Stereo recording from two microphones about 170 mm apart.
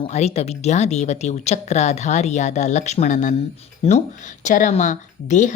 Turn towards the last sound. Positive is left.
turn(degrees=45)  # may be behind; listen again after turning